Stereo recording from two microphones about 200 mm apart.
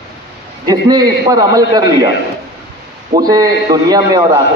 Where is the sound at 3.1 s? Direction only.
20° right (ahead or behind).